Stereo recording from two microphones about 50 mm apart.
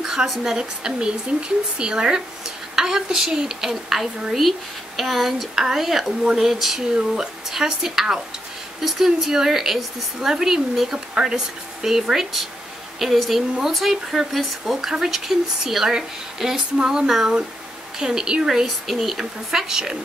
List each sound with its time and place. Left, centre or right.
0.0 s a sound: centre
0.4 s a woman's voice: centre
18.9 s a woman's voice: centre